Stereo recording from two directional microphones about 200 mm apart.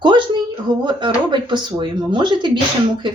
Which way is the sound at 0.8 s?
25° right (ahead or behind).